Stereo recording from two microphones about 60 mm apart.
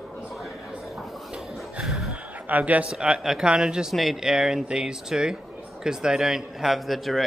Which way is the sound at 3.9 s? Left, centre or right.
Centre.